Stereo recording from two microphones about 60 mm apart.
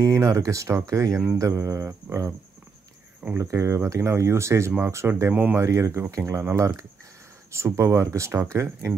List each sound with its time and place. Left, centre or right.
0.0 s speech: right
3.3 s speech: right
5.3 s speech: right
5.6 s speech: right
6.5 s speech: right